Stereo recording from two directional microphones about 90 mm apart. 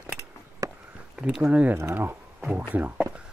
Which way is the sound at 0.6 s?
40° right (ahead or behind).